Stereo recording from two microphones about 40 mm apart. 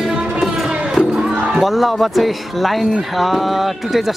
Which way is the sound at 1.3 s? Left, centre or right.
Centre.